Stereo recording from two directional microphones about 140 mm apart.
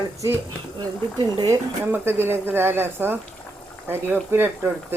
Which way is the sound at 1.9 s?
15° right (ahead or behind).